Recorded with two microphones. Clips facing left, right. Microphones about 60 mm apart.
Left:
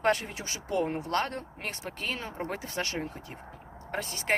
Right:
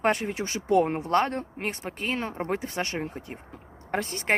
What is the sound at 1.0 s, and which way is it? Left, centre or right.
Speech, right.